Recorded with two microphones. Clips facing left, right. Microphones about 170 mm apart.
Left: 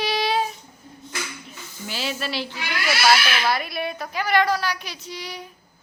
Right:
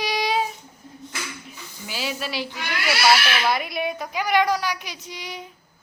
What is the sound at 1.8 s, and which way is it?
Speech, 10° right (ahead or behind).